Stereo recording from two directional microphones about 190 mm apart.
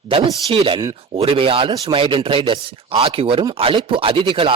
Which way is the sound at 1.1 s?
30° right (ahead or behind).